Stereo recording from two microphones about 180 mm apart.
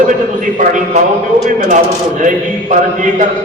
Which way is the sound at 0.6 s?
45° right (ahead or behind).